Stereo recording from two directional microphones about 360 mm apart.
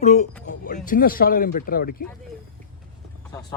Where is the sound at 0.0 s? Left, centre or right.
Centre.